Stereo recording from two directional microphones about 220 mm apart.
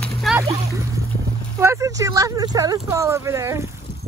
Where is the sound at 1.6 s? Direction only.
15° right (ahead or behind).